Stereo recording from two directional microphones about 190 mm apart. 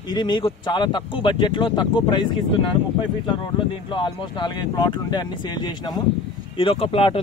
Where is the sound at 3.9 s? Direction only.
25° left (ahead or behind).